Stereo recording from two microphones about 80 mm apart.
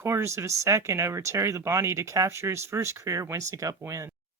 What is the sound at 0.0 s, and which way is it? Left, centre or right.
Speech, right.